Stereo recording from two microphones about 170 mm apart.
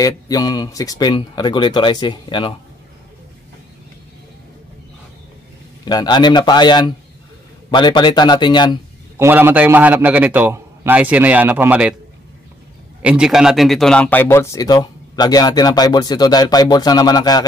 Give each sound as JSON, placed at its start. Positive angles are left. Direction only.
{"t": 0.0, "sound": "speech", "side_deg": 20}
{"t": 5.9, "sound": "speech", "side_deg": 25}
{"t": 9.2, "sound": "a man's voice", "side_deg": -10}
{"t": 13.0, "sound": "speech", "side_deg": -5}